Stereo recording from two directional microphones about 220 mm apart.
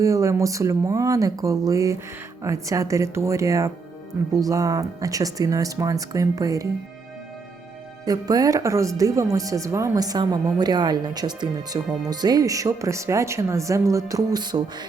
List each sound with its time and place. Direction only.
0.0 s speech: 15° right (ahead or behind)
8.0 s speech: 15° right (ahead or behind)